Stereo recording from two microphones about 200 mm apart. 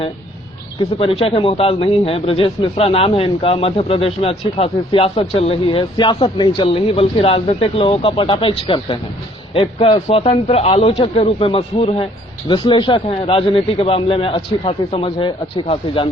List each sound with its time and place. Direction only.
0.8 s speech: 30° left (ahead or behind)